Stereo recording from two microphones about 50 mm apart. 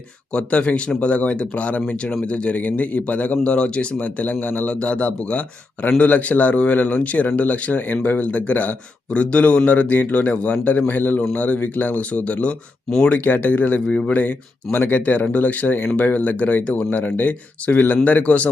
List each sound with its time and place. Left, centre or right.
0.3 s a man's voice: left
13.8 s speech: centre
14.1 s a man's voice: left